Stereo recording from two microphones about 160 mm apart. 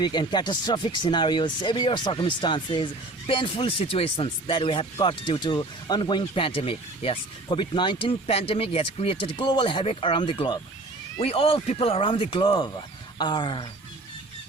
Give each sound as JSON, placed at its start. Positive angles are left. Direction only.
{"t": 0.0, "sound": "speech", "side_deg": 25}